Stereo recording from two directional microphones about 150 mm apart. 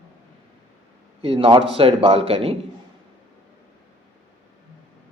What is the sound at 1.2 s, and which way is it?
Speech, 35° right (ahead or behind).